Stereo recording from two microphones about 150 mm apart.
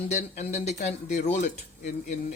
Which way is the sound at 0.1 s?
50° left (ahead or behind).